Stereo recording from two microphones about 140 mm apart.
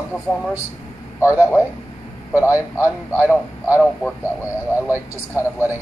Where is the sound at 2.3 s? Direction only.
10° right (ahead or behind).